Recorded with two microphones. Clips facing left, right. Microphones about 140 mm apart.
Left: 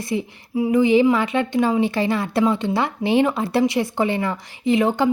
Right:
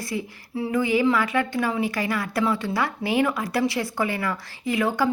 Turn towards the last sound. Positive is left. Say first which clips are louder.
# left 5 dB
turn(degrees=25)  # may be behind; listen again after turning